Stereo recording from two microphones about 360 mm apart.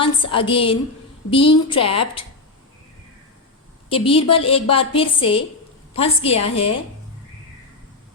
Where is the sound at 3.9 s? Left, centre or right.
Centre.